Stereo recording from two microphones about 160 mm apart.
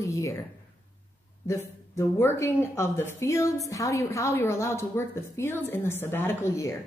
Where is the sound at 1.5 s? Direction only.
15° left (ahead or behind).